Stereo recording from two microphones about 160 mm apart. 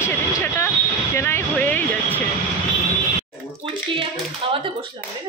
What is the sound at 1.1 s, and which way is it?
Music, 15° left (ahead or behind).